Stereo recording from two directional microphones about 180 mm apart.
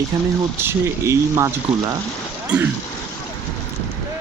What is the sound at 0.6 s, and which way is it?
Speech, 15° right (ahead or behind).